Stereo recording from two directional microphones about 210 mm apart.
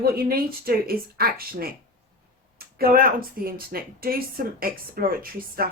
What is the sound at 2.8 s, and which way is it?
A woman's voice, 45° right (ahead or behind).